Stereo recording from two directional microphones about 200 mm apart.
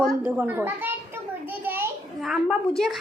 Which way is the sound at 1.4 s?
10° right (ahead or behind).